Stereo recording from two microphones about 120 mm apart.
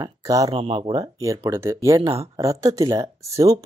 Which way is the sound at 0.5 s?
50° right (ahead or behind).